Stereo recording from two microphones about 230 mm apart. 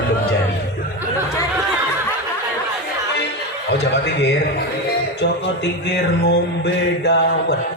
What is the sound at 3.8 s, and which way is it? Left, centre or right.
Mantra, left.